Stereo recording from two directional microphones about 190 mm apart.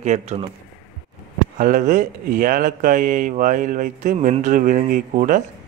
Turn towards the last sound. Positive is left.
turn(degrees=-45)  # may be behind; listen again after turning